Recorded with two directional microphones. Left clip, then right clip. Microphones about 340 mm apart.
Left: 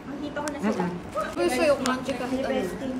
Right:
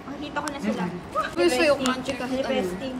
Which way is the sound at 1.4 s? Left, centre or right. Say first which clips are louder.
Right 2 dB; right.